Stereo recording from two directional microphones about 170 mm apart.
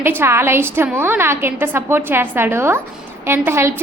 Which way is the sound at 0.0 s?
15° right (ahead or behind).